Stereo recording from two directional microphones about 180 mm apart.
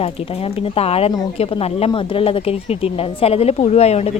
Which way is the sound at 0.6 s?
35° left (ahead or behind).